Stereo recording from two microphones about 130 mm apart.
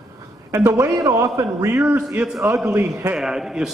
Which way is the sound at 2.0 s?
5° right (ahead or behind).